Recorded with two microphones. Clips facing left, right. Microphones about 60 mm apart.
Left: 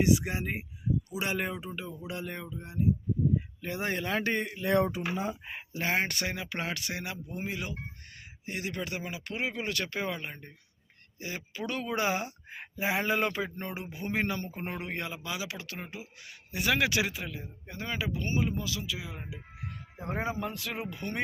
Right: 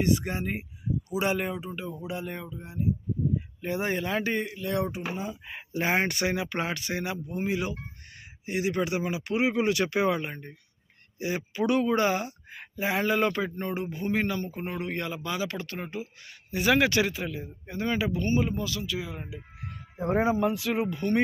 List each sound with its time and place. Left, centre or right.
0.0 s speech: centre
3.6 s speech: centre
5.1 s speech: left
5.8 s speech: centre
11.9 s speech: centre
18.2 s speech: centre
18.4 s speech: centre
20.1 s speech: centre